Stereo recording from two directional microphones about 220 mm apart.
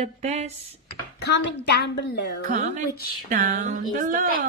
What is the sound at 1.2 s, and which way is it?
A woman's voice, 50° left (ahead or behind).